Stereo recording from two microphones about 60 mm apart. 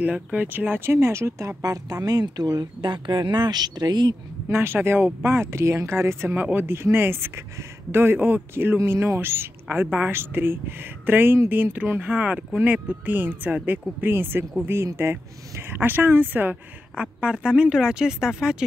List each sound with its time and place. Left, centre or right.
0.0 s speech: right
4.5 s speech: right
6.3 s speech: right
6.7 s speech: right
8.7 s speech: right
9.8 s speech: right
10.1 s speech: right
16.9 s speech: centre